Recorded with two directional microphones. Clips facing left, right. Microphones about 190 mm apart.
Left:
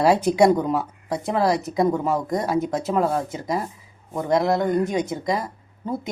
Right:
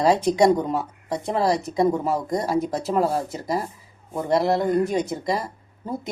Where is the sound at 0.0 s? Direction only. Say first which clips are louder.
Left 1 dB; 5° left (ahead or behind).